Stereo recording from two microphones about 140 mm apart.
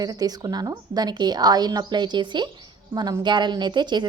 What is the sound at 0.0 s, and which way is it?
A woman's voice, 30° right (ahead or behind).